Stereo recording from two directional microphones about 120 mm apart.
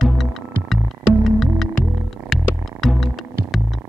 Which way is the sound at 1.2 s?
Centre (ahead or behind).